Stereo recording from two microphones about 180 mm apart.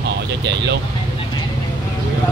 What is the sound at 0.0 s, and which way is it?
Vehicle, 70° right (ahead or behind).